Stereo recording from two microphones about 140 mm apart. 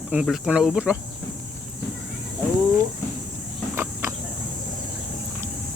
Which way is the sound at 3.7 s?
15° right (ahead or behind).